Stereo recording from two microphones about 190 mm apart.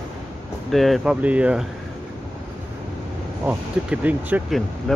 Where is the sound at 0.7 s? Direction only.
Centre (ahead or behind).